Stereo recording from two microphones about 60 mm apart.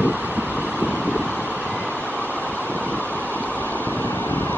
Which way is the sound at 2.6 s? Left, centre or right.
Right.